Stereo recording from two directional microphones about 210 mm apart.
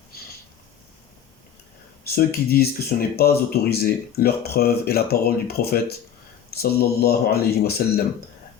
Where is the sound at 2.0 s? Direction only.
45° left (ahead or behind).